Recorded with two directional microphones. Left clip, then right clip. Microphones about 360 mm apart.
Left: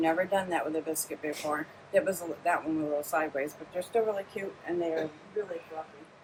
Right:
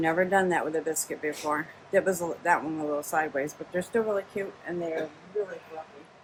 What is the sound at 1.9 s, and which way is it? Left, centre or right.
Speech, centre.